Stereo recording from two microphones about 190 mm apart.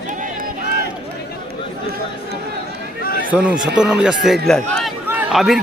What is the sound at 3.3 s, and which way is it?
A man's voice, 5° right (ahead or behind).